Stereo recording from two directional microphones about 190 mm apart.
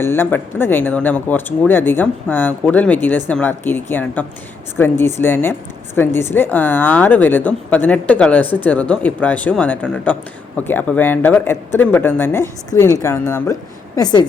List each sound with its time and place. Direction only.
0.0 s a woman's voice: 10° left (ahead or behind)